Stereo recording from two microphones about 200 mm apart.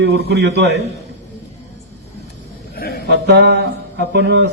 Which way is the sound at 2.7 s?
50° left (ahead or behind).